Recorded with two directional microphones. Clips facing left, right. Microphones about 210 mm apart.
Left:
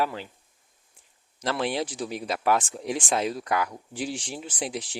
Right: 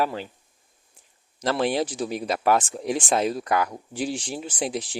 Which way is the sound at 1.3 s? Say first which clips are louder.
Right 4 dB; 40° right (ahead or behind).